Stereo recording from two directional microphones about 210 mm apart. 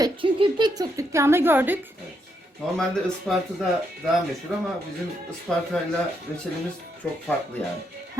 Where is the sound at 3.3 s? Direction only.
Centre (ahead or behind).